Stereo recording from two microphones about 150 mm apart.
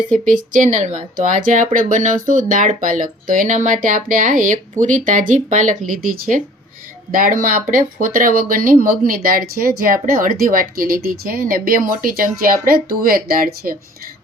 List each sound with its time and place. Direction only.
0.3 s speech: 60° right (ahead or behind); by 13.7 s 75° right (ahead or behind)